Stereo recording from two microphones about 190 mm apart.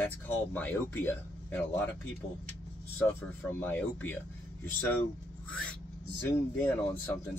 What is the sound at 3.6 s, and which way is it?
Speech, 10° left (ahead or behind).